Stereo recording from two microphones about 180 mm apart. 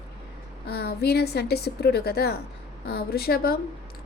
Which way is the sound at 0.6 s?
60° left (ahead or behind).